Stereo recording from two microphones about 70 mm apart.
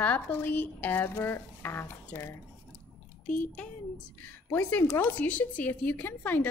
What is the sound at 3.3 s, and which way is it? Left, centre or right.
Speech, centre.